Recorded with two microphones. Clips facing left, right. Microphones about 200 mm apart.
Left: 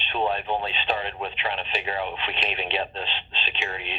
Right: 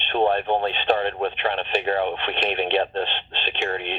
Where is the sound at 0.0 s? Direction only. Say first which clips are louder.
Right 6 dB; 55° right (ahead or behind).